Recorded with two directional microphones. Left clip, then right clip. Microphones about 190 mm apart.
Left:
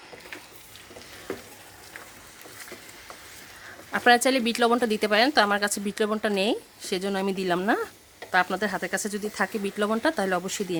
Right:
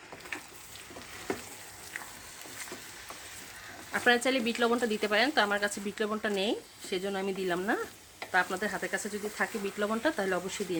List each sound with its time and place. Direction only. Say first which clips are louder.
3.9 s speech: left 6 dB; 55° left (ahead or behind)